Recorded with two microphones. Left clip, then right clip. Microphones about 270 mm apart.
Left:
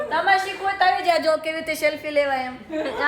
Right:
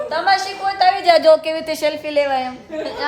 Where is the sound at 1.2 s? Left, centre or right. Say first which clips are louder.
Right 8 dB; centre.